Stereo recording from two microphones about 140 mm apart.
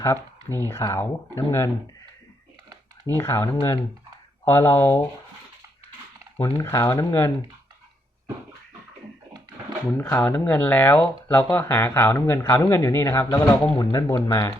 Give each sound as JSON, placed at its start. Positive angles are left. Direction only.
{"t": 0.0, "sound": "speech", "side_deg": 20}
{"t": 3.2, "sound": "speech", "side_deg": 20}
{"t": 6.3, "sound": "speech", "side_deg": 20}
{"t": 10.1, "sound": "speech", "side_deg": 20}